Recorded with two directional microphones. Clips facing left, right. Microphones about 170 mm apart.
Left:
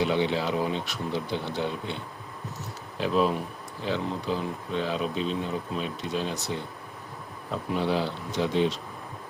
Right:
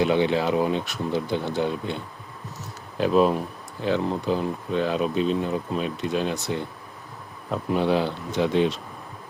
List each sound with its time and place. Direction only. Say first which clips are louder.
0.0 s speech: right 4 dB; 55° right (ahead or behind)
3.0 s speech: right 5 dB; 50° right (ahead or behind)
7.8 s speech: right 4 dB; 55° right (ahead or behind)